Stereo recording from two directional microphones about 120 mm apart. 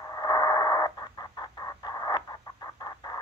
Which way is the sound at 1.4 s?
35° left (ahead or behind).